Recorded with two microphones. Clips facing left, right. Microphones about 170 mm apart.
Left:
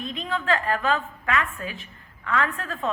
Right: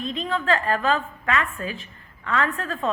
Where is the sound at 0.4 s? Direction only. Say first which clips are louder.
Right 1 dB; 10° left (ahead or behind).